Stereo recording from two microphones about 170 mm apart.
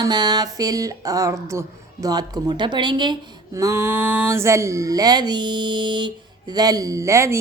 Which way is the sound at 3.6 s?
15° right (ahead or behind).